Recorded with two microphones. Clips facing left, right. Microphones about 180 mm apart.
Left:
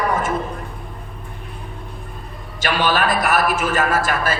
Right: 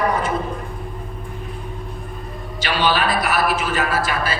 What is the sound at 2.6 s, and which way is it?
A man's voice, 45° left (ahead or behind).